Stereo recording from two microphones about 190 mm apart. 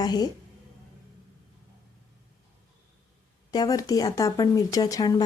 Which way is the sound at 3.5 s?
20° left (ahead or behind).